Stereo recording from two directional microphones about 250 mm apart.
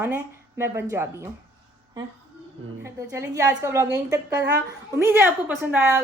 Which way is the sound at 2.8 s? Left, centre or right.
Centre.